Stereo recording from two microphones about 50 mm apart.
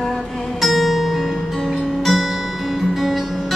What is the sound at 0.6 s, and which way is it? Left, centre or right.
Music, centre.